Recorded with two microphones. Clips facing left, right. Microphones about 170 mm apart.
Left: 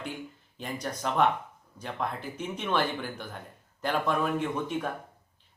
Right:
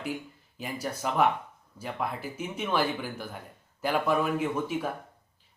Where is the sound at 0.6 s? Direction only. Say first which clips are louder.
Right 1 dB; 5° right (ahead or behind).